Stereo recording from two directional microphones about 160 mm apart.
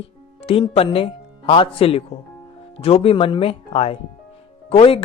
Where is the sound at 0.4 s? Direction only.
40° left (ahead or behind).